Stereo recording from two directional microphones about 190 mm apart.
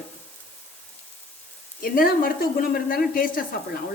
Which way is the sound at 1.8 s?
50° left (ahead or behind).